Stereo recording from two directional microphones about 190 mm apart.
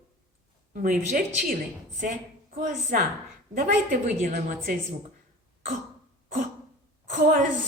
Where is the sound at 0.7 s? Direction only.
50° right (ahead or behind).